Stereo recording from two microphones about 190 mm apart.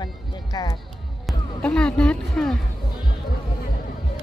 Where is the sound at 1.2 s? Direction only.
5° left (ahead or behind).